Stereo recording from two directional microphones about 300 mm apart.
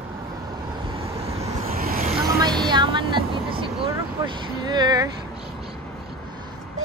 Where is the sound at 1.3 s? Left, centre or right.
Right.